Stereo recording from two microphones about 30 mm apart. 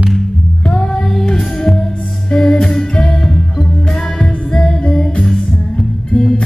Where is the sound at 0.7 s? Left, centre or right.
Centre.